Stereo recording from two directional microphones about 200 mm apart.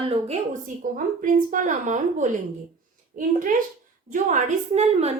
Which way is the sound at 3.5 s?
40° right (ahead or behind).